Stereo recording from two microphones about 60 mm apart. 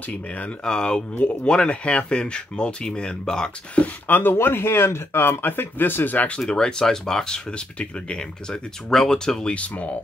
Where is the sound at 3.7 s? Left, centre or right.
Left.